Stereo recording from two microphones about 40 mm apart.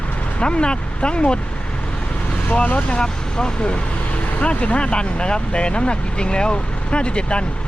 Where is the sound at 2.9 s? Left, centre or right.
Centre.